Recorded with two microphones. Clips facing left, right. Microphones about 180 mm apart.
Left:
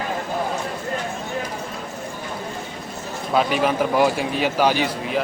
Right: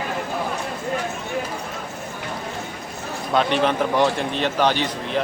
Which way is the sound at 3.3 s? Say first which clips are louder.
Even; 5° left (ahead or behind).